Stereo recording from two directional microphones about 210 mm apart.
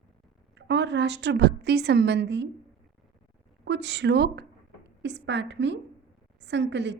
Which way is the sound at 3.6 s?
55° right (ahead or behind).